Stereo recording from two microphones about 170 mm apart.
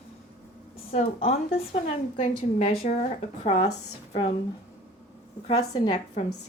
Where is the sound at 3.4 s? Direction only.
30° left (ahead or behind).